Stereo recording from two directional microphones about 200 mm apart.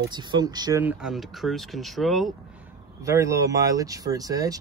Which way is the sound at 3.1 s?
15° right (ahead or behind).